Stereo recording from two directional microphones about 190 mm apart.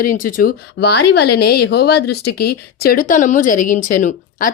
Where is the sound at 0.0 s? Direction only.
45° left (ahead or behind).